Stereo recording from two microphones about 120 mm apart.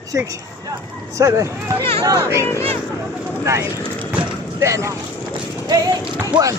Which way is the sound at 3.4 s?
25° right (ahead or behind).